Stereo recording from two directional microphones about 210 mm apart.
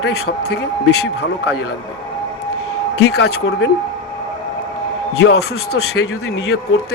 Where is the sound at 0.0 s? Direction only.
50° left (ahead or behind).